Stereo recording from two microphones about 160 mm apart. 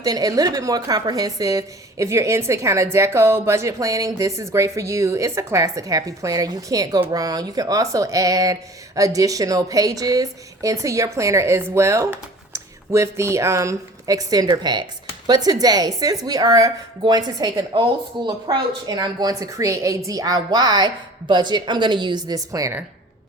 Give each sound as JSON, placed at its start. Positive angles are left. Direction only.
{"t": 0.0, "sound": "a woman's voice", "side_deg": -25}